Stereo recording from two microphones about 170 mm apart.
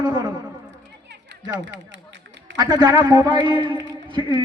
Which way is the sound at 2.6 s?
25° right (ahead or behind).